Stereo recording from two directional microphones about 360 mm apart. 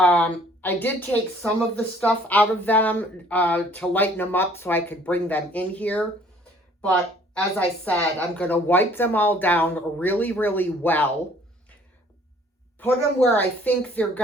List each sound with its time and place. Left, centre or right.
0.0 s speech: centre
7.3 s speech: centre
12.8 s speech: centre